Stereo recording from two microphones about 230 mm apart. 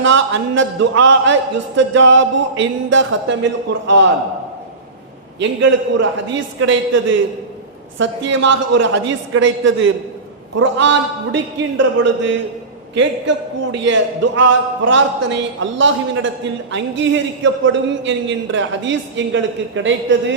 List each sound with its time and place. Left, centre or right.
0.0 s a man's voice: right
5.4 s a man's voice: right
12.9 s a man's voice: right